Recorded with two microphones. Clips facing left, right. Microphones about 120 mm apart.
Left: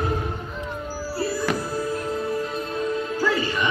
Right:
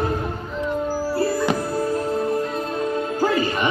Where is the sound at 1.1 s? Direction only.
55° right (ahead or behind).